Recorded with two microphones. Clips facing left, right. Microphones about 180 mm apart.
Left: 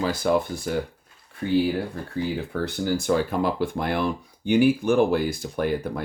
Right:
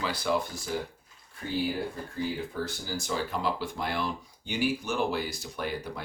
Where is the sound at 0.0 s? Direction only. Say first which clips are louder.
Left 7 dB; 45° left (ahead or behind).